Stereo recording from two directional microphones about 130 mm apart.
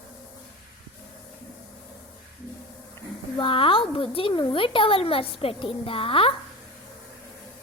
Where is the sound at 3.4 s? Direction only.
40° left (ahead or behind).